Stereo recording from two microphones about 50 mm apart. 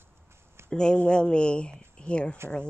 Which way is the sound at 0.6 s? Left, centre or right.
Centre.